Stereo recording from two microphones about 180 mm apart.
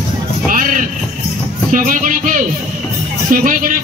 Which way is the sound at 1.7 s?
45° right (ahead or behind).